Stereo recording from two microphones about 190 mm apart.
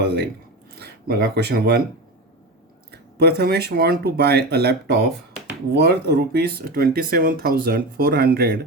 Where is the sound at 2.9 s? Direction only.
55° right (ahead or behind).